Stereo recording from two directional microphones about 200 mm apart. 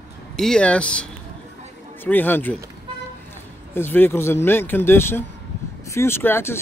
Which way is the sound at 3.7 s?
10° left (ahead or behind).